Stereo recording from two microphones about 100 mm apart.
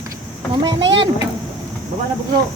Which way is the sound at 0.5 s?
45° right (ahead or behind).